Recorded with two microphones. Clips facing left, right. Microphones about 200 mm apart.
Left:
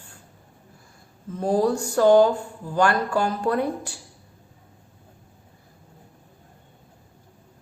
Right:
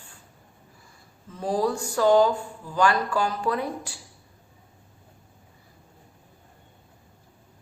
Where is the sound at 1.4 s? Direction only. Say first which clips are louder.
Left 4 dB; 45° left (ahead or behind).